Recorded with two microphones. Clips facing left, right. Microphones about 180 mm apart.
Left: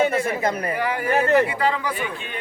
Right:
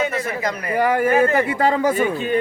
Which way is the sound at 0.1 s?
30° left (ahead or behind).